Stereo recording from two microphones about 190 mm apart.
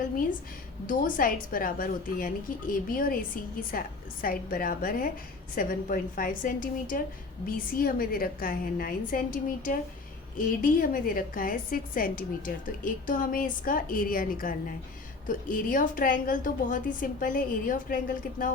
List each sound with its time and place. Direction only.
0.9 s a woman's voice: 45° left (ahead or behind)